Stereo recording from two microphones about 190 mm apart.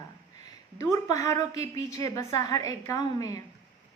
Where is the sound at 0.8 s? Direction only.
15° left (ahead or behind).